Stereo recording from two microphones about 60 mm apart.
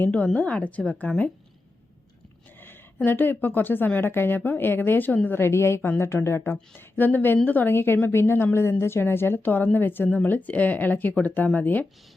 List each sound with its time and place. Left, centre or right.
0.0 s speech: left
2.6 s a woman's voice: left
5.4 s a woman's voice: left